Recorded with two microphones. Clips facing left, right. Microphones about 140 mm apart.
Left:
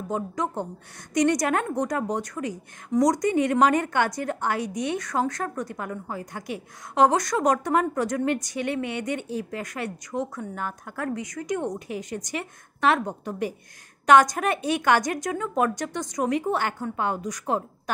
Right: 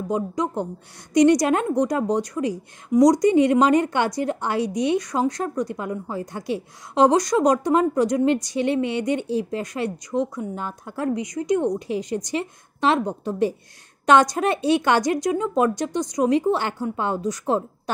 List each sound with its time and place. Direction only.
0.1 s a woman's voice: 15° right (ahead or behind)